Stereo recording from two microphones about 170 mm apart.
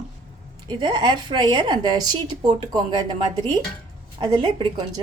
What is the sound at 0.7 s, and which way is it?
A woman's voice, 25° right (ahead or behind).